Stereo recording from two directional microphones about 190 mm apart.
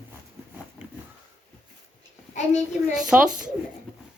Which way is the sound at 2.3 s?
40° left (ahead or behind).